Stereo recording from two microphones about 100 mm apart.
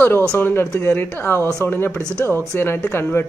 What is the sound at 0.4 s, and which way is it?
Speech, 25° left (ahead or behind).